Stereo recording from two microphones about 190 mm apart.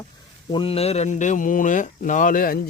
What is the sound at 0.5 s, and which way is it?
Speech, 30° left (ahead or behind).